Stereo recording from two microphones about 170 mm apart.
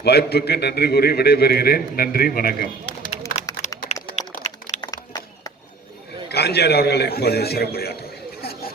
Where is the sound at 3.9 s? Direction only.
45° left (ahead or behind).